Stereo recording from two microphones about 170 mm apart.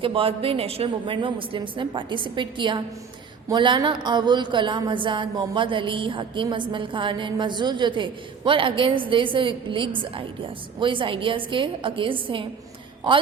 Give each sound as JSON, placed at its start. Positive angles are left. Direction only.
{"t": 0.0, "sound": "a woman's voice", "side_deg": -30}